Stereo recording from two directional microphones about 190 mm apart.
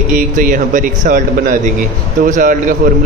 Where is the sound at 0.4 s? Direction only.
45° right (ahead or behind).